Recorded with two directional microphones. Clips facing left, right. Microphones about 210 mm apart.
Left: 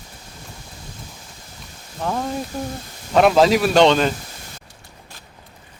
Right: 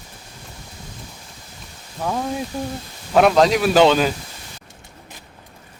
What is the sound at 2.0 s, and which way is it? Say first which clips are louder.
Speech: even; 5° right (ahead or behind).